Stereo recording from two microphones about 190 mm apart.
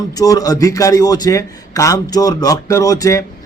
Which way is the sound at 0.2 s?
20° left (ahead or behind).